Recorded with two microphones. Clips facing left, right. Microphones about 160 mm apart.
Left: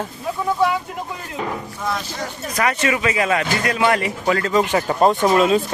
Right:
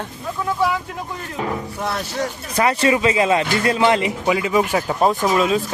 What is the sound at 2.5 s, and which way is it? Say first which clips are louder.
Speech: right 3 dB; 30° right (ahead or behind).